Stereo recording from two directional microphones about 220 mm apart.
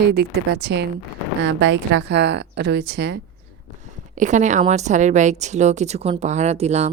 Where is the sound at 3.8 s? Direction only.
35° right (ahead or behind).